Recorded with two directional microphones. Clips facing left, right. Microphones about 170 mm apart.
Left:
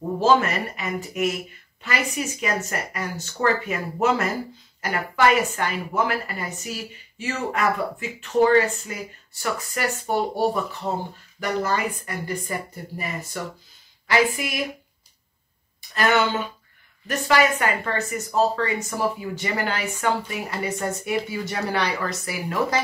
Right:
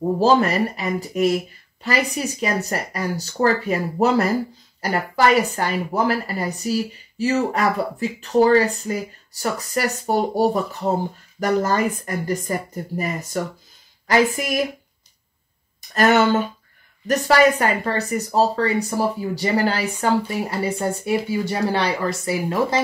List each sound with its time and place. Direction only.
0.2 s speech: 35° right (ahead or behind)
15.9 s speech: 40° right (ahead or behind)